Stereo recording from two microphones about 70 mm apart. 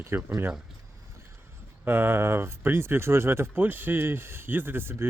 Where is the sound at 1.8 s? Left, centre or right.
Right.